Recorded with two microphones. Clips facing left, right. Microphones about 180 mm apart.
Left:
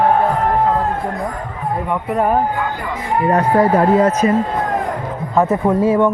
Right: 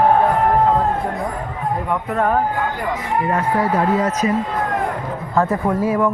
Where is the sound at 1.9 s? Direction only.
10° left (ahead or behind).